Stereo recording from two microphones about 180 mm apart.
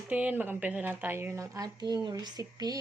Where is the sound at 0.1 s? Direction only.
10° right (ahead or behind).